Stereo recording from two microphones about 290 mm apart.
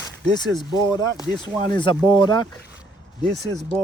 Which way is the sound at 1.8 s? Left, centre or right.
Centre.